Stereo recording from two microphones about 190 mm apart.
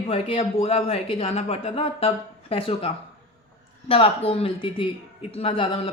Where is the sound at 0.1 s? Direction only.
30° left (ahead or behind).